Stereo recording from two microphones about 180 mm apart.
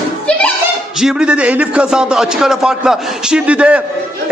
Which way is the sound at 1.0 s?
5° right (ahead or behind).